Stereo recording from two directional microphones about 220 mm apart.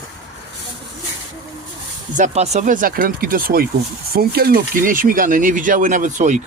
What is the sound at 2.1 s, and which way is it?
Speech, 30° right (ahead or behind).